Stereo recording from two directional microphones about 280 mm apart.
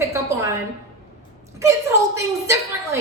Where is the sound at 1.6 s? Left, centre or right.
Centre.